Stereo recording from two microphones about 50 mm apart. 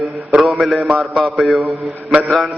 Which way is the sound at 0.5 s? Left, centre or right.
Centre.